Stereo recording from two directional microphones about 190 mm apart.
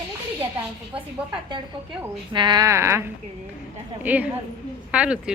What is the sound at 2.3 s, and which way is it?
A woman's voice, 25° right (ahead or behind).